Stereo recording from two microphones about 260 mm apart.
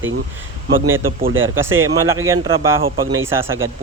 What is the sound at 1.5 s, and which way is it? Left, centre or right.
Speech, centre.